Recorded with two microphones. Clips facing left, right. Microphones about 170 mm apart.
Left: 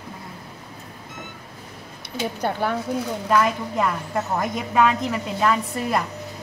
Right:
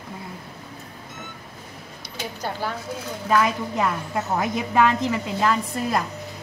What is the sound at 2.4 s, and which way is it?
Speech, 55° left (ahead or behind).